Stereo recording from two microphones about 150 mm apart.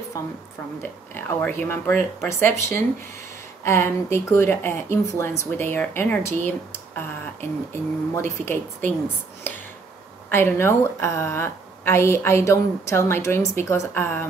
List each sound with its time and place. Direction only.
1.1 s a woman's voice: 15° left (ahead or behind)
10.3 s a woman's voice: 15° left (ahead or behind)